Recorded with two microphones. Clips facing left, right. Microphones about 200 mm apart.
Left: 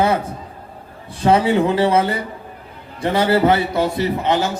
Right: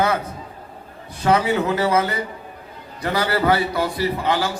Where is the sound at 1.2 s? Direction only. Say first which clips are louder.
Left 4 dB; 30° left (ahead or behind).